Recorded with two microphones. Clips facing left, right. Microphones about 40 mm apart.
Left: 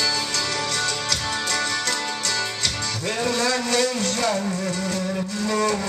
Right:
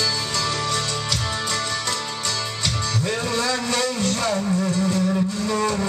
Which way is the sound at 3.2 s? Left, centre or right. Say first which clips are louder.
Left 1 dB; centre.